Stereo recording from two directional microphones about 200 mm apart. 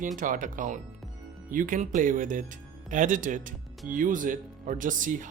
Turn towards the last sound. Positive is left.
turn(degrees=-40)  # may be behind; listen again after turning